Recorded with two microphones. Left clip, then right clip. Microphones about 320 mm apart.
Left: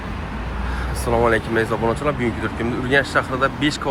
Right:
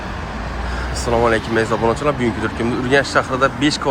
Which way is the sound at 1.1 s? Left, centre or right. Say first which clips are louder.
Right 2 dB; centre.